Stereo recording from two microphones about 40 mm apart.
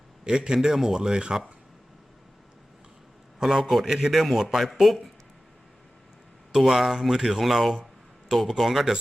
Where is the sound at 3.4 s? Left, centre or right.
Centre.